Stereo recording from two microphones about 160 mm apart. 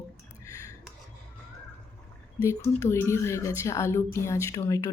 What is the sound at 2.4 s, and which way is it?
A woman's voice, 15° left (ahead or behind).